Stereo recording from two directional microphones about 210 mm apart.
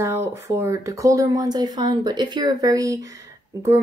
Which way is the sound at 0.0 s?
10° right (ahead or behind).